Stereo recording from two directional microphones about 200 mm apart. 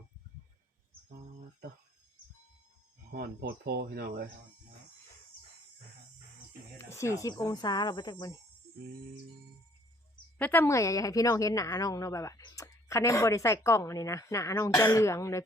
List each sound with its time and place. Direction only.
3.1 s speech: 50° right (ahead or behind)
6.9 s speech: 15° left (ahead or behind)
10.3 s a woman's voice: 10° left (ahead or behind)